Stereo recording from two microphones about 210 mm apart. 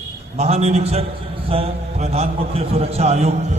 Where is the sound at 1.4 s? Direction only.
30° right (ahead or behind).